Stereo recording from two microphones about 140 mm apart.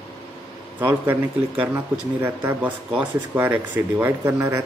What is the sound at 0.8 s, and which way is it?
Speech, 10° right (ahead or behind).